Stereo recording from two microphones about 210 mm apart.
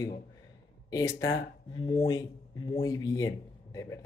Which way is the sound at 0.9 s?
15° left (ahead or behind).